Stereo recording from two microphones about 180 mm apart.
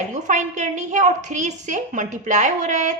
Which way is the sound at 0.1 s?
40° right (ahead or behind).